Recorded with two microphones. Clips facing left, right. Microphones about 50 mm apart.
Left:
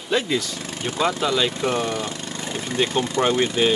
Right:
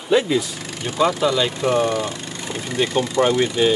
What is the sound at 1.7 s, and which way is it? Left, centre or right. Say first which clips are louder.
Speech: right 5 dB; right.